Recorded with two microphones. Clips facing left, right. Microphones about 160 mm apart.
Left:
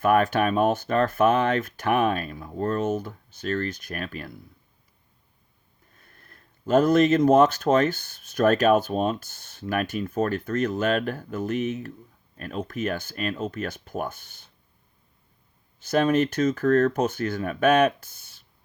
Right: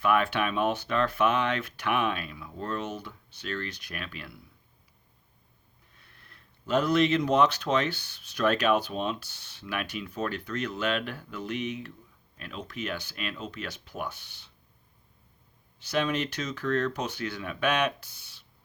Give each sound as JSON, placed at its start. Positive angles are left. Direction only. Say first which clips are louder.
{"t": 0.0, "sound": "speech", "louder": "left 5 dB", "side_deg": 45}
{"t": 5.9, "sound": "speech", "louder": "left 4 dB", "side_deg": 45}
{"t": 15.8, "sound": "speech", "louder": "left 7 dB", "side_deg": 45}